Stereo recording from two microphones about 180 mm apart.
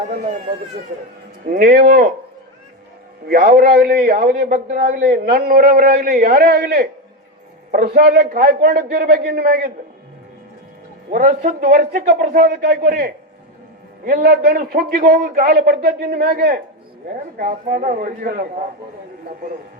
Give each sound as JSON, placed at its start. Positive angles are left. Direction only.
{"t": 0.0, "sound": "a man's voice", "side_deg": -40}
{"t": 3.2, "sound": "a man's voice", "side_deg": -55}
{"t": 11.1, "sound": "a man's voice", "side_deg": -50}
{"t": 15.1, "sound": "a man's voice", "side_deg": -45}
{"t": 15.5, "sound": "a man's voice", "side_deg": -60}